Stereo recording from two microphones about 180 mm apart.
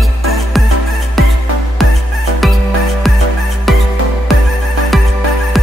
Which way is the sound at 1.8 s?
Centre (ahead or behind).